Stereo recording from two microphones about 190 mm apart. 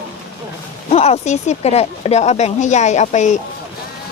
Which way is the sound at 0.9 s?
35° left (ahead or behind).